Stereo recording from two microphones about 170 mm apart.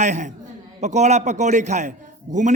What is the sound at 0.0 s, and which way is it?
A man's voice, 45° right (ahead or behind).